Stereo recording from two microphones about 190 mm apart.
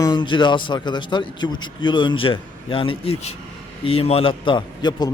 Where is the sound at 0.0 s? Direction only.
25° left (ahead or behind).